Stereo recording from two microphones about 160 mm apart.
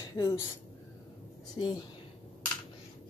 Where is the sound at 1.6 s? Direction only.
30° left (ahead or behind).